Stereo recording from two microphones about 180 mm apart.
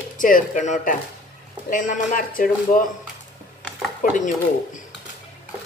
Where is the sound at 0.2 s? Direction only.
45° left (ahead or behind).